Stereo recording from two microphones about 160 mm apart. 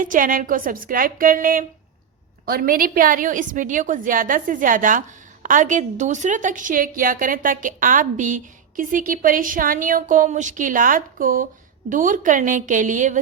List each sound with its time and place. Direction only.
0.0 s a woman's voice: 55° right (ahead or behind)